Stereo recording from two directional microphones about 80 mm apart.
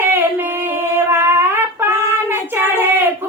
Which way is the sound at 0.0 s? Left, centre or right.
Right.